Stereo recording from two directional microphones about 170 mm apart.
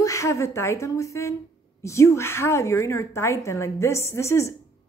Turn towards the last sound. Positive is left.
turn(degrees=15)  # may be behind; listen again after turning